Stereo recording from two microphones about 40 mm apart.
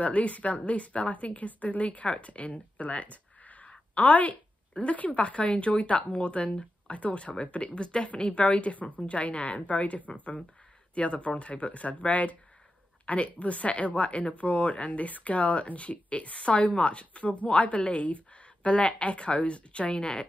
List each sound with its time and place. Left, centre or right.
0.0 s speech: left